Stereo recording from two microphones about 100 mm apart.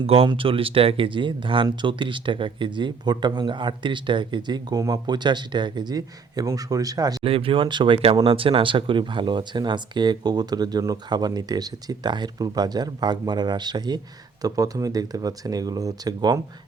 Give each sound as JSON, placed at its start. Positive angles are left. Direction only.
{"t": 0.0, "sound": "speech", "side_deg": -70}
{"t": 7.2, "sound": "speech", "side_deg": -65}